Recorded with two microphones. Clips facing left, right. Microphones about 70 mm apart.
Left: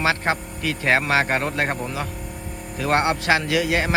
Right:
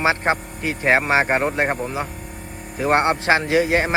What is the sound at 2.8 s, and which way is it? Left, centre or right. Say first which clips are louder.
Speech: right 3 dB; right.